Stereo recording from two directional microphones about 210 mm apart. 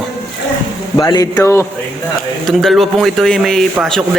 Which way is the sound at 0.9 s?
20° left (ahead or behind).